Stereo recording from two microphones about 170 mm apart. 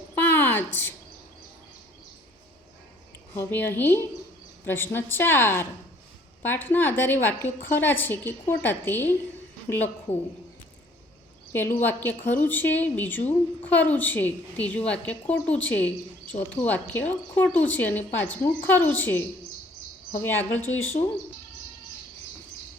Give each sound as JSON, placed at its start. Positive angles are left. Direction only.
{"t": 0.2, "sound": "a sound", "side_deg": 10}
{"t": 3.3, "sound": "a woman's voice", "side_deg": 10}
{"t": 10.1, "sound": "a woman's voice", "side_deg": 40}
{"t": 11.5, "sound": "a woman's voice", "side_deg": 10}
{"t": 20.2, "sound": "a woman's voice", "side_deg": 10}